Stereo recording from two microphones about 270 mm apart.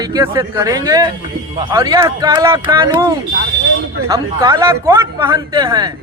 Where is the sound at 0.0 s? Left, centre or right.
Centre.